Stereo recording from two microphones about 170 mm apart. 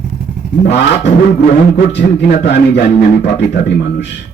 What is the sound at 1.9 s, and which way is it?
Speech, 85° left.